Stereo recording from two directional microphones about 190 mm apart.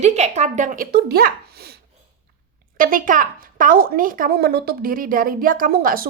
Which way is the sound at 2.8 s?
45° right (ahead or behind).